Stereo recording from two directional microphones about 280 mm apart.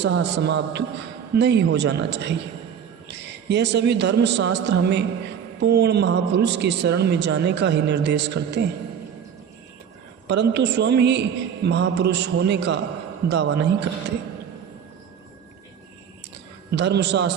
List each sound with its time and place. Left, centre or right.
0.0 s a man's voice: right
10.2 s a man's voice: right
16.7 s a man's voice: right